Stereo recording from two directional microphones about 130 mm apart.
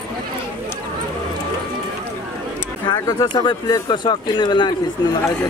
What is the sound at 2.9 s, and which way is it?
Speech, 30° left (ahead or behind).